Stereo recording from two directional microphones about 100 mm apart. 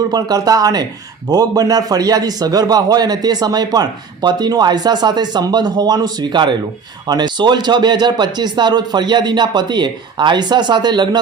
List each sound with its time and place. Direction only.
0.1 s a man's voice: 40° right (ahead or behind)